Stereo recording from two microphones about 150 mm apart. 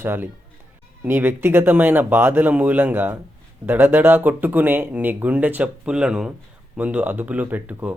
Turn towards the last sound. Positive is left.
turn(degrees=-10)  # may be behind; listen again after turning